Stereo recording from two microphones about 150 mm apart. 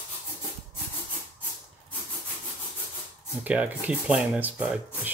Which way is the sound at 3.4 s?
10° right (ahead or behind).